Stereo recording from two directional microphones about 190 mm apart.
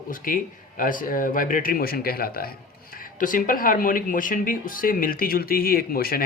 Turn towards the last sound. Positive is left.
turn(degrees=50)  # may be behind; listen again after turning